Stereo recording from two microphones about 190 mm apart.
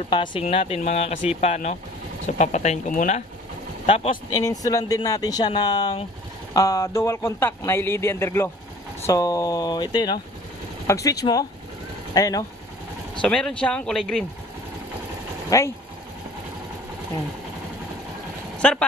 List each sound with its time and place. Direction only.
0.1 s speech: 25° left (ahead or behind); by 3.3 s 40° left (ahead or behind)
3.8 s speech: 30° left (ahead or behind)
4.3 s a man's voice: 20° left (ahead or behind)
13.2 s speech: 5° left (ahead or behind)
15.5 s a man's voice: 15° left (ahead or behind)
18.6 s speech: 5° left (ahead or behind)